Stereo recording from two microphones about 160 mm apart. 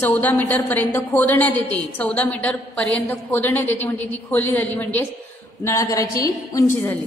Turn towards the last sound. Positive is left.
turn(degrees=15)  # may be behind; listen again after turning